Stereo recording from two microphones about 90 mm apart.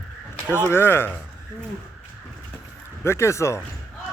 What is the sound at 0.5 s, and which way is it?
Speech, 25° left (ahead or behind).